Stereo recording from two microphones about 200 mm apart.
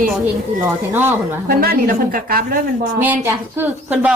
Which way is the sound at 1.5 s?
45° right (ahead or behind).